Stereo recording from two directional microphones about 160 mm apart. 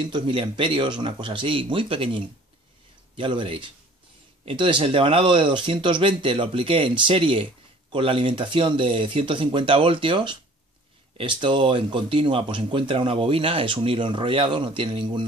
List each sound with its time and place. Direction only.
0.0 s speech: 35° right (ahead or behind)